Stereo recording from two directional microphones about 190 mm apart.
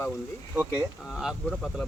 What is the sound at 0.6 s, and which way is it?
Speech, 5° right (ahead or behind).